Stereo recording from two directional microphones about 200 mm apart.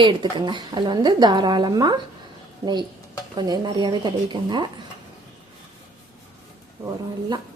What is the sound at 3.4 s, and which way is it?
Speech, 20° right (ahead or behind).